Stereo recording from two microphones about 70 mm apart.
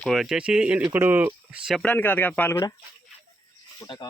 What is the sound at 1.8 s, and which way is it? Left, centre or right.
Speech, left.